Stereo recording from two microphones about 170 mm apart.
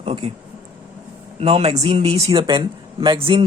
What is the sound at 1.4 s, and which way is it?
A man's voice, 35° right (ahead or behind).